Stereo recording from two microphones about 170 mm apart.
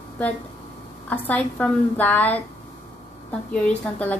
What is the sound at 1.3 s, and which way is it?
A woman's voice, 10° left (ahead or behind).